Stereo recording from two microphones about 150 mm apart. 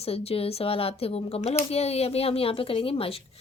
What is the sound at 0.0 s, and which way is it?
Speech, 40° left (ahead or behind).